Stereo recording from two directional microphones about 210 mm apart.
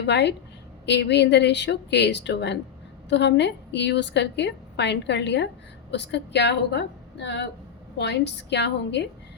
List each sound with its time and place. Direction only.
0.0 s a woman's voice: 55° left (ahead or behind)